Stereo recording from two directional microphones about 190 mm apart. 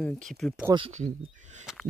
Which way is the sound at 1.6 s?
Centre (ahead or behind).